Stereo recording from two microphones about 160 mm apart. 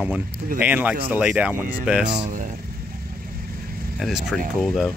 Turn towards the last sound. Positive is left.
turn(degrees=0)  # may be behind; listen again after turning